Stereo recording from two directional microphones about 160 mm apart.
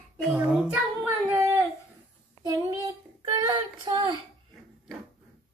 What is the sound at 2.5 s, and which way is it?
Child singing, 25° right (ahead or behind).